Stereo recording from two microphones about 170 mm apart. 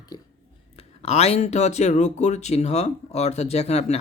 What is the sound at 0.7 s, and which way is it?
Speech, 35° left (ahead or behind).